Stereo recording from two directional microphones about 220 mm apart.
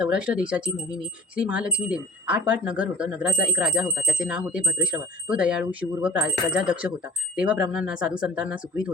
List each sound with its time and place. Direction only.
0.0 s speech: 5° right (ahead or behind)